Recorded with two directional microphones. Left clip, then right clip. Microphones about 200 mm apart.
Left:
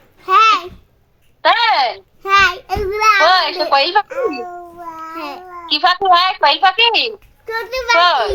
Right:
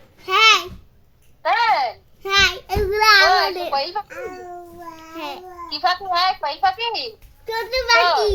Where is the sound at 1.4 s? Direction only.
45° left (ahead or behind).